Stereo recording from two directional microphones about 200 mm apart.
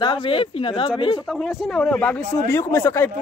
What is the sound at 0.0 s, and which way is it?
Speech, 25° left (ahead or behind).